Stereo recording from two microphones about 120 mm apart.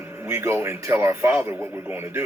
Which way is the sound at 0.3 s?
20° right (ahead or behind).